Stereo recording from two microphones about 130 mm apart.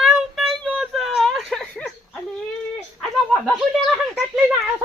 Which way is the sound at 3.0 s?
Centre (ahead or behind).